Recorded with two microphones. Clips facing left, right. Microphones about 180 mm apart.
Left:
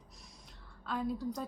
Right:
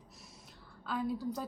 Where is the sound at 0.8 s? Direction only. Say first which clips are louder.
Even; centre (ahead or behind).